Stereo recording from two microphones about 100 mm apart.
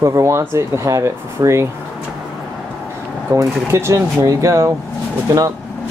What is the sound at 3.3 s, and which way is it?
Speech, 35° right (ahead or behind).